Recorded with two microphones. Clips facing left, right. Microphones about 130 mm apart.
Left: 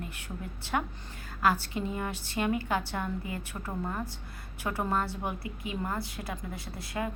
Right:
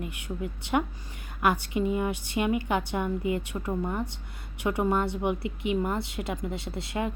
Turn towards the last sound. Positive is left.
turn(degrees=-25)  # may be behind; listen again after turning